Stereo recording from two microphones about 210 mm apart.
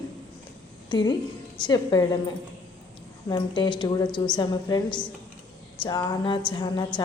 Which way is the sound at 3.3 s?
20° left (ahead or behind).